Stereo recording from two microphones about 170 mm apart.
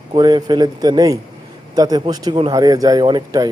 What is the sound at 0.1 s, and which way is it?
Speech, 25° right (ahead or behind).